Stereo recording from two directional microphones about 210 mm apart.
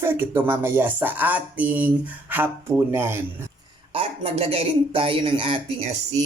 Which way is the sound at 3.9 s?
25° right (ahead or behind).